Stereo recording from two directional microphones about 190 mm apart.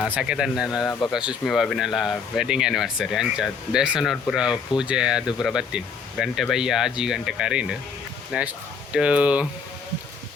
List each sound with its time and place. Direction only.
0.0 s speech: 5° right (ahead or behind)
0.9 s speech: 15° left (ahead or behind)
1.1 s speech: 5° right (ahead or behind)